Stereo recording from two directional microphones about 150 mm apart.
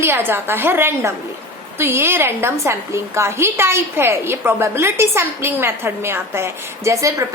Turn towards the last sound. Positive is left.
turn(degrees=-20)  # may be behind; listen again after turning